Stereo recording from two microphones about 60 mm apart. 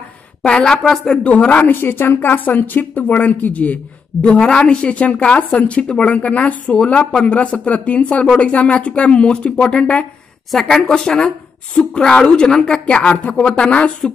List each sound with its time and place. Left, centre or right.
0.4 s a woman's voice: centre
1.2 s speech: left
1.7 s speech: left; by 10.0 s centre
10.5 s a woman's voice: centre
13.1 s a woman's voice: left